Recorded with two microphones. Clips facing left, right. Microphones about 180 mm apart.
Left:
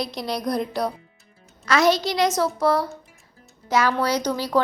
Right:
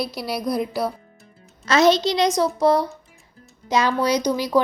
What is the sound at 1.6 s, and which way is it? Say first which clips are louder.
A woman's voice: right 3 dB; 20° right (ahead or behind).